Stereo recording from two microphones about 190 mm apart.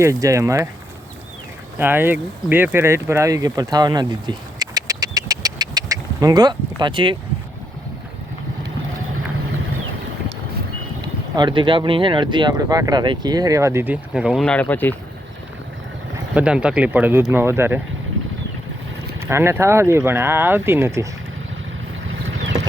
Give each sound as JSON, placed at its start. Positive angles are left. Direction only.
{"t": 0.0, "sound": "speech", "side_deg": -15}
{"t": 1.8, "sound": "speech", "side_deg": -10}
{"t": 11.3, "sound": "speech", "side_deg": -25}
{"t": 16.3, "sound": "speech", "side_deg": -5}
{"t": 19.2, "sound": "speech", "side_deg": -15}
{"t": 22.5, "sound": "a sound", "side_deg": -20}